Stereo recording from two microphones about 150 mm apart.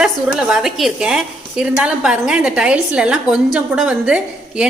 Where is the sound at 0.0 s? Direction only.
5° right (ahead or behind).